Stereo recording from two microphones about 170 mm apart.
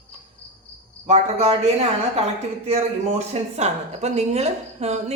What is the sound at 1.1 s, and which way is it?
Speech, 40° right (ahead or behind).